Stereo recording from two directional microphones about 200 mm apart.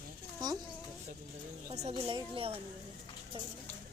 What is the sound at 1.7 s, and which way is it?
Speech, 30° right (ahead or behind).